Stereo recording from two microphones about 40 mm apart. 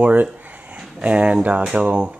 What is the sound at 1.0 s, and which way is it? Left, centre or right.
Speech, right.